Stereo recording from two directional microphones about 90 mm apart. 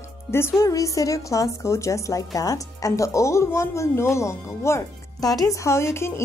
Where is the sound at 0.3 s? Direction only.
25° left (ahead or behind).